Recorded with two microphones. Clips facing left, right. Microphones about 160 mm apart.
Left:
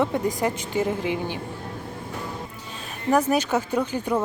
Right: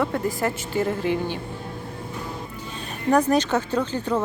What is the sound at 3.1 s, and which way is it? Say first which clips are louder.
Speech: right 1 dB; 5° left (ahead or behind).